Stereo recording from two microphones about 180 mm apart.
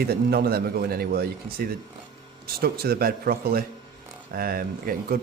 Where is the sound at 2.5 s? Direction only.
60° right (ahead or behind).